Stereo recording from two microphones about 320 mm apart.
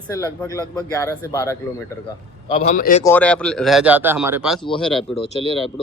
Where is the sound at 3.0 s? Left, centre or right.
Centre.